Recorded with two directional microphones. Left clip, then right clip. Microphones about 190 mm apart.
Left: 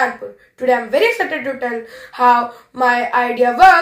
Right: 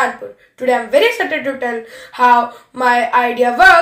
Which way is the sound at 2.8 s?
25° right (ahead or behind).